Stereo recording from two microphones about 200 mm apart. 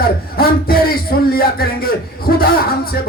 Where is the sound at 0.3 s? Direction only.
50° left (ahead or behind).